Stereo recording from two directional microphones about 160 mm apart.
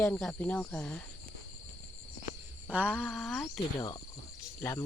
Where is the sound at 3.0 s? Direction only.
Centre (ahead or behind).